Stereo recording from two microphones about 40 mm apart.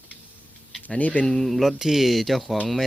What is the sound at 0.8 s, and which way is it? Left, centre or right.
Speech, left.